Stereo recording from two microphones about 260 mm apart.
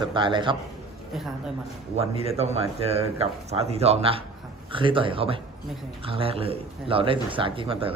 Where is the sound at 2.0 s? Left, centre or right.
Right.